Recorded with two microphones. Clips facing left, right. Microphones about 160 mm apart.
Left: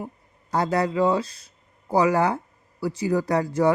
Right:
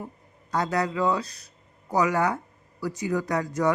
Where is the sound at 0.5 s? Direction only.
30° left (ahead or behind).